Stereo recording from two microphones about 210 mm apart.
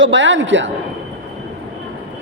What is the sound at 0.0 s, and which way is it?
Speech, 65° right (ahead or behind).